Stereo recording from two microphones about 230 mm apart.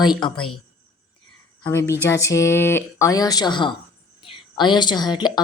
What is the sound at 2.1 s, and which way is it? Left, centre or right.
Speech, centre.